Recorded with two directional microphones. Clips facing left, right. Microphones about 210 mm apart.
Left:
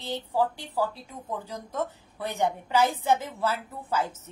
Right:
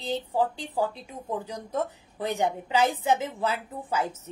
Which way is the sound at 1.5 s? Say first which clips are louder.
Right 2 dB; 15° right (ahead or behind).